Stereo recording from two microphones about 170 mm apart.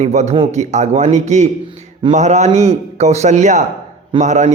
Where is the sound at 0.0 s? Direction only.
40° right (ahead or behind).